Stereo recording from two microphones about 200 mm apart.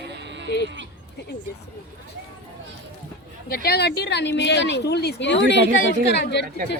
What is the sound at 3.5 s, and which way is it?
A woman's voice, 55° left (ahead or behind).